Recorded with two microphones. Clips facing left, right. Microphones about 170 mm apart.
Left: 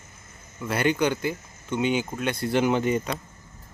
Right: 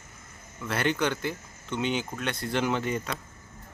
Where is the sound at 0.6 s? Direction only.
15° left (ahead or behind).